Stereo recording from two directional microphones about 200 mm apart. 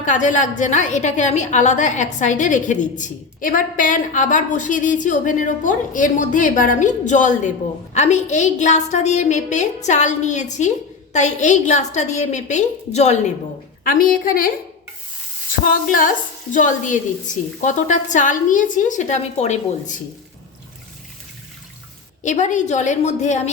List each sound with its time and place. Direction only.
0.0 s a woman's voice: 40° left (ahead or behind)
13.8 s a woman's voice: 45° left (ahead or behind)
15.6 s a woman's voice: 45° left (ahead or behind)
22.2 s a woman's voice: 40° left (ahead or behind)